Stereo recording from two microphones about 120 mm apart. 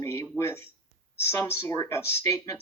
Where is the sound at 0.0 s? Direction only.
20° left (ahead or behind).